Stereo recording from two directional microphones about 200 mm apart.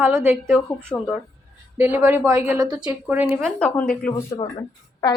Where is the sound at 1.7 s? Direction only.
10° right (ahead or behind).